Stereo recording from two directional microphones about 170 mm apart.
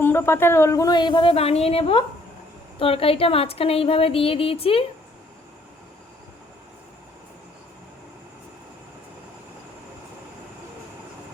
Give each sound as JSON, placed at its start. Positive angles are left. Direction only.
{"t": 0.0, "sound": "a woman's voice", "side_deg": 15}